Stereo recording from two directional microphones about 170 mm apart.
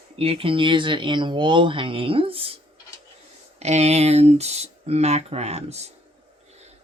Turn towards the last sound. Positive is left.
turn(degrees=-40)  # may be behind; listen again after turning